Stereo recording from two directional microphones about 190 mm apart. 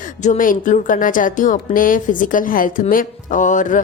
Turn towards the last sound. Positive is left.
turn(degrees=40)  # may be behind; listen again after turning